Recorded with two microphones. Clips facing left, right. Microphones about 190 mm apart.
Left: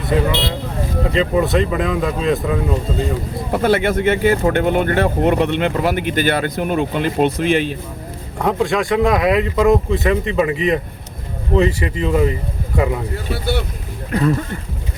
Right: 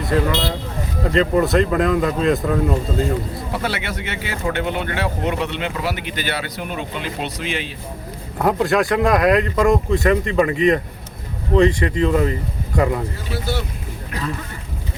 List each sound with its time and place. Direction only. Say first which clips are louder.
0.1 s speech: left 1 dB; centre (ahead or behind)
3.5 s speech: left 11 dB; 50° left (ahead or behind)
8.4 s speech: even; 5° right (ahead or behind)